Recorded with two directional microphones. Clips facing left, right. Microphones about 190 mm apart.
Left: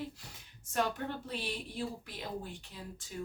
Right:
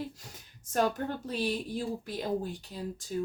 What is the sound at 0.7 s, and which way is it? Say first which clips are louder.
Speech: right 5 dB; 45° right (ahead or behind).